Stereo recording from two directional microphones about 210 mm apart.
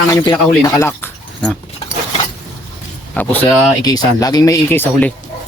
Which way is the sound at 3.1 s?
10° left (ahead or behind).